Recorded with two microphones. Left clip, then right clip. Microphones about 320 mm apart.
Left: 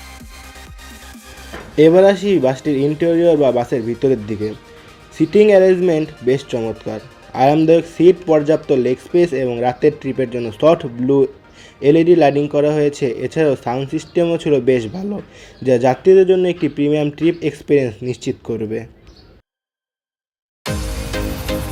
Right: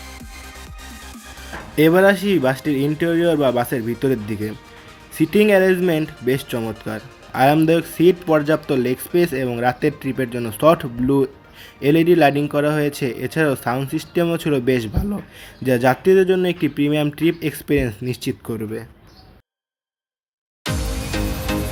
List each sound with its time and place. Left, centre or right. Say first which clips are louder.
1.7 s speech: left 4 dB; centre